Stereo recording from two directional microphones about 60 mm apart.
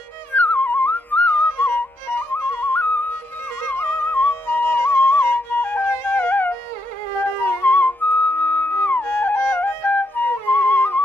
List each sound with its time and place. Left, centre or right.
0.3 s music: left
3.6 s flute: left
7.6 s music: left